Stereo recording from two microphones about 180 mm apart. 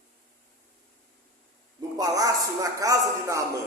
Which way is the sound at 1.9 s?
20° right (ahead or behind).